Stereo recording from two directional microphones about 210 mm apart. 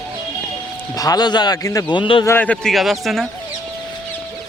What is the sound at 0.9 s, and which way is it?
A man's voice, 15° left (ahead or behind).